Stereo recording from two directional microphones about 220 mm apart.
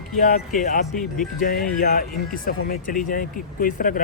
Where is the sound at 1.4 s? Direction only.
40° left (ahead or behind).